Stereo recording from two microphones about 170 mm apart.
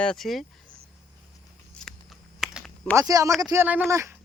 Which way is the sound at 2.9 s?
20° right (ahead or behind).